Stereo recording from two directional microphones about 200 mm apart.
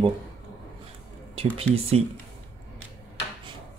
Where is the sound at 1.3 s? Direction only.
30° right (ahead or behind).